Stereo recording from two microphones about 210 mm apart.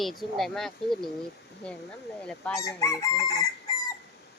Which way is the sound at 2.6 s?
15° left (ahead or behind).